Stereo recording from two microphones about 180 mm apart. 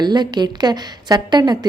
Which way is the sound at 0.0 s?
25° right (ahead or behind).